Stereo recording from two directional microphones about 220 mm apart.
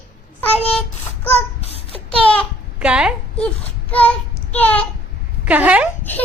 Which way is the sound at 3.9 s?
5° left (ahead or behind).